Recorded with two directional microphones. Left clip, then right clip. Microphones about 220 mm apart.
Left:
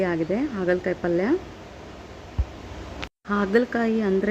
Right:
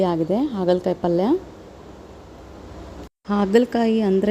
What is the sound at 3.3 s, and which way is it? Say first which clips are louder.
Speech: right 4 dB; 25° right (ahead or behind).